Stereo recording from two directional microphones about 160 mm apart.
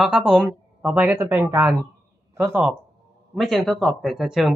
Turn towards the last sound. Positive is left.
turn(degrees=0)  # may be behind; listen again after turning